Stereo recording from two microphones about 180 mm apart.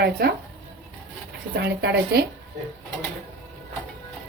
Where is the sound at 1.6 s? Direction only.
65° right (ahead or behind).